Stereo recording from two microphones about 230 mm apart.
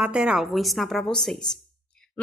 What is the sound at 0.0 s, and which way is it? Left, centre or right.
A woman's voice, centre.